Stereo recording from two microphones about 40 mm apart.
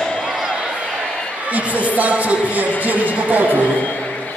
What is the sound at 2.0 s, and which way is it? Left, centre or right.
Speech, right.